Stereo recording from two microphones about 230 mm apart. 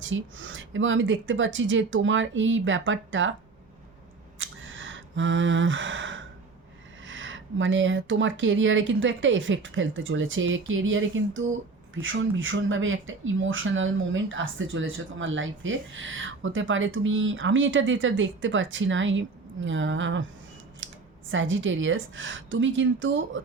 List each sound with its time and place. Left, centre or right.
0.0 s speech: right
4.4 s a sound: right
7.0 s speech: right